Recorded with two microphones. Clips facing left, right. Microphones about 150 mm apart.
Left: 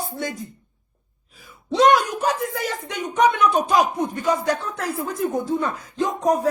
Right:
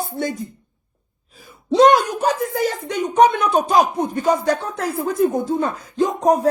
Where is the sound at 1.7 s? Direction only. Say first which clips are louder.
Right 3 dB; 30° right (ahead or behind).